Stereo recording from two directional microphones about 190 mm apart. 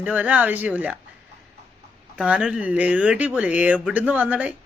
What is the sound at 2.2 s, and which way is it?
Speech, 5° right (ahead or behind).